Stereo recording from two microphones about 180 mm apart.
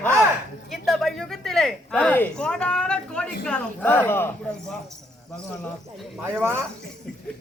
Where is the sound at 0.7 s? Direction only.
Centre (ahead or behind).